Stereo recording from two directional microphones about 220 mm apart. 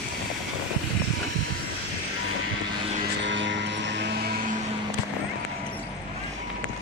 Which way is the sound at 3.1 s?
55° right (ahead or behind).